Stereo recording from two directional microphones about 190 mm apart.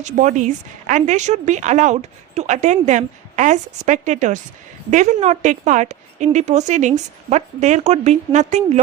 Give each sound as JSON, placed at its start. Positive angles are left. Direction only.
{"t": 0.0, "sound": "speech", "side_deg": -40}